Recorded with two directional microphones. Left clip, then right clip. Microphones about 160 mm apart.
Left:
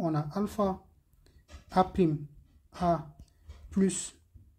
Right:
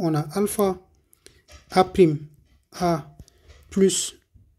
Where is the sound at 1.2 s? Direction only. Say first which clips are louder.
Right 8 dB; 20° right (ahead or behind).